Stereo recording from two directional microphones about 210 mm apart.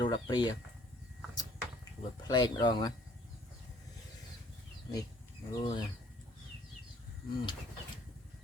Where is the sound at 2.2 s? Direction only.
20° left (ahead or behind).